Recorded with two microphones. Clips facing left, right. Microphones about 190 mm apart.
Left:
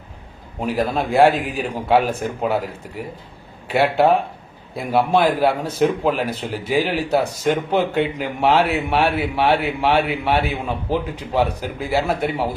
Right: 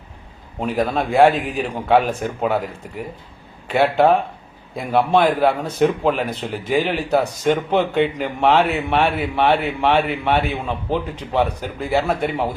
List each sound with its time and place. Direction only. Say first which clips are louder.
0.6 s a man's voice: even; 5° left (ahead or behind)